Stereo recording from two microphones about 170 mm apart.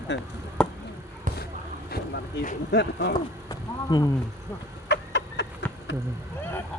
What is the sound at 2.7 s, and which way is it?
Speech, 85° left.